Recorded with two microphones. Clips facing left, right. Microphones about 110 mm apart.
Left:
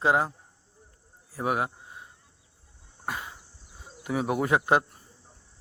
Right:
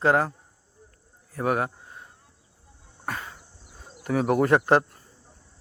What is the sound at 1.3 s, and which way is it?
Speech, 10° left (ahead or behind).